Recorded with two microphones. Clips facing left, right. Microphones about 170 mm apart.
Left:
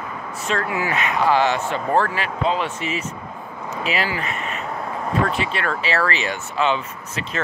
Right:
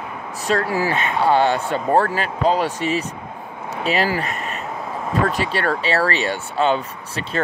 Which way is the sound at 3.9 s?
40° right (ahead or behind).